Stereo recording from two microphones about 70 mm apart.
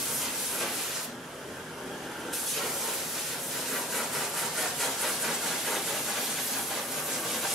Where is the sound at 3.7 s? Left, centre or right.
Centre.